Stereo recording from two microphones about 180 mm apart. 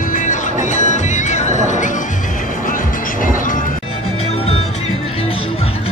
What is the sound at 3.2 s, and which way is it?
Music, 50° left (ahead or behind).